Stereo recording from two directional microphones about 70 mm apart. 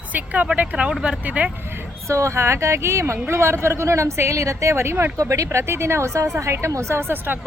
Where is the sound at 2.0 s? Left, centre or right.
Right.